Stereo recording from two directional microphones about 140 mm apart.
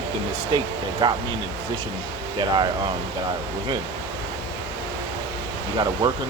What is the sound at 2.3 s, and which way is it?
Speech, 35° right (ahead or behind).